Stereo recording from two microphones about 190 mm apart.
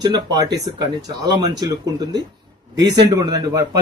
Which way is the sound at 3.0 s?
20° right (ahead or behind).